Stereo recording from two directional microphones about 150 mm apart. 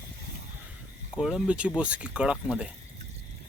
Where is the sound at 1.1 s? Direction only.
5° right (ahead or behind).